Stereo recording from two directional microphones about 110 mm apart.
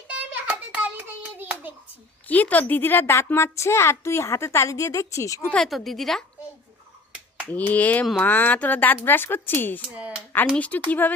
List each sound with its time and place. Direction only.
0.1 s a sound: 10° right (ahead or behind)
1.4 s hands: 15° right (ahead or behind)
2.2 s a woman's voice: 15° left (ahead or behind)
5.5 s a woman's voice: 5° left (ahead or behind)
7.5 s speech: 15° left (ahead or behind)
9.9 s speech: 10° right (ahead or behind)
10.5 s speech: 10° left (ahead or behind)